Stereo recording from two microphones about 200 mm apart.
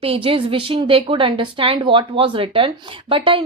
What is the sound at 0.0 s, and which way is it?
A woman's voice, 30° right (ahead or behind).